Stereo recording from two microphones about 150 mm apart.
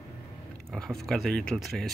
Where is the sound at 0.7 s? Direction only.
Centre (ahead or behind).